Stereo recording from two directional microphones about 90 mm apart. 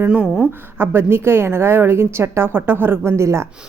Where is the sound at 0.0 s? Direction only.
15° right (ahead or behind).